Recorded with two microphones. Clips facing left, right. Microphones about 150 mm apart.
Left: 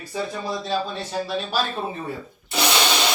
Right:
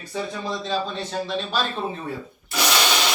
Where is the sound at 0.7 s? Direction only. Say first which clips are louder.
Even; 5° left (ahead or behind).